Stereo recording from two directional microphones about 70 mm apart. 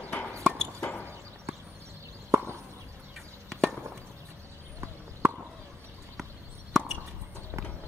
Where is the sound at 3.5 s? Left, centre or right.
Centre.